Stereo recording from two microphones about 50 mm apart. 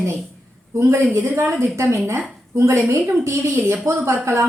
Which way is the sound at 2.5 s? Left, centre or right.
Right.